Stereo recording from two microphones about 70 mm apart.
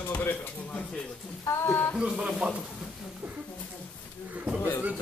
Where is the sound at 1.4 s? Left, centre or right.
Left.